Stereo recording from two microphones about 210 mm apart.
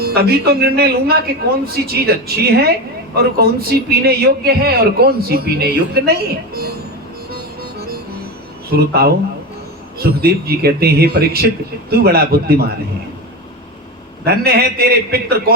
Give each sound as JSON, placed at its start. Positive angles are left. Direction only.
{"t": 0.0, "sound": "a man's voice", "side_deg": -50}
{"t": 7.3, "sound": "music", "side_deg": -45}
{"t": 8.7, "sound": "a man's voice", "side_deg": -45}
{"t": 14.3, "sound": "a man's voice", "side_deg": -50}